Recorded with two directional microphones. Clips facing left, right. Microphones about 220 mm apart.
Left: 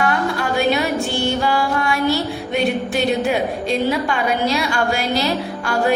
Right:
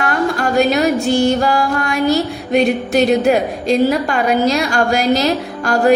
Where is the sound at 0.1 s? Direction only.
45° right (ahead or behind).